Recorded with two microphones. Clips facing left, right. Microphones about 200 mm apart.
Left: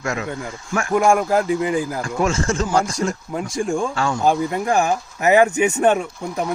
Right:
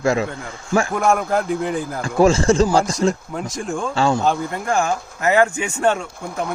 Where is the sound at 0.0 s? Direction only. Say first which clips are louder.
Right 7 dB; 30° right (ahead or behind).